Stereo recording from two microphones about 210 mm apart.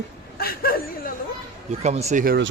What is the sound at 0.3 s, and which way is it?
Chuckle, 45° left (ahead or behind).